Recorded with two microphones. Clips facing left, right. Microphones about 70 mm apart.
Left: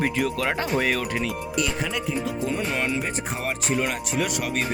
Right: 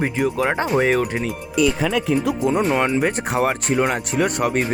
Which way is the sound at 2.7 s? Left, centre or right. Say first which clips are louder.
Right 8 dB; right.